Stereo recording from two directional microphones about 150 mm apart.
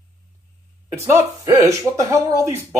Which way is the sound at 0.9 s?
20° right (ahead or behind).